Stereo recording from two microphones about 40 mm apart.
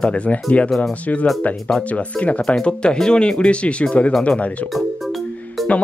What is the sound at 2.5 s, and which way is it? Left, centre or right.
Speech, left.